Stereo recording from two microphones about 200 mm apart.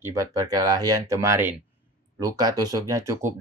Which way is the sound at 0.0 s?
15° right (ahead or behind).